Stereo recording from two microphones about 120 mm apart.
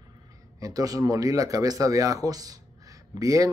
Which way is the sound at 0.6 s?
30° right (ahead or behind).